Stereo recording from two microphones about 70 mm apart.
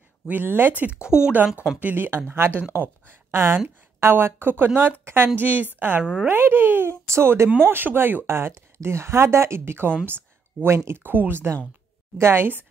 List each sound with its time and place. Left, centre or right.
0.3 s speech: right
1.0 s speech: centre
1.8 s speech: right
7.4 s speech: right
10.0 s a sound: right
10.9 s speech: right